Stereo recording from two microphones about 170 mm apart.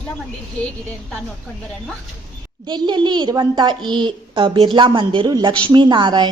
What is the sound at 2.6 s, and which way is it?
A woman's voice, 25° right (ahead or behind).